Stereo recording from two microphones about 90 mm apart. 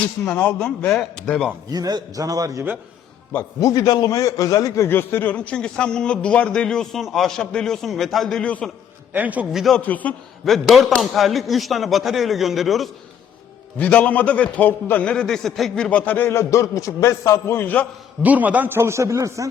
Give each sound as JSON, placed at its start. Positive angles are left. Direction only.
{"t": 0.3, "sound": "a man's voice", "side_deg": 15}
{"t": 1.7, "sound": "a man's voice", "side_deg": -50}
{"t": 3.6, "sound": "a man's voice", "side_deg": 45}
{"t": 4.9, "sound": "a man's voice", "side_deg": 25}
{"t": 9.1, "sound": "a man's voice", "side_deg": -15}
{"t": 9.5, "sound": "speech", "side_deg": -5}
{"t": 9.7, "sound": "a man's voice", "side_deg": 20}
{"t": 10.4, "sound": "speech", "side_deg": 0}
{"t": 13.7, "sound": "a man's voice", "side_deg": 15}
{"t": 15.1, "sound": "a man's voice", "side_deg": 5}
{"t": 18.2, "sound": "a man's voice", "side_deg": -15}
{"t": 18.8, "sound": "speech", "side_deg": -30}